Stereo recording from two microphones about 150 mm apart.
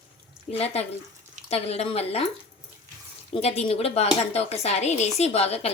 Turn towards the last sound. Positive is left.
turn(degrees=45)  # may be behind; listen again after turning